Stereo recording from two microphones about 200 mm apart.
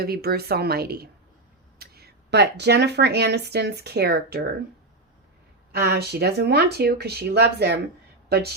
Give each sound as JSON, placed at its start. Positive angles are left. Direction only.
{"t": 0.0, "sound": "speech", "side_deg": -50}
{"t": 5.7, "sound": "speech", "side_deg": -55}